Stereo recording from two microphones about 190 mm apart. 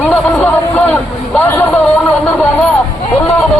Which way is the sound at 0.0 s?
10° left (ahead or behind).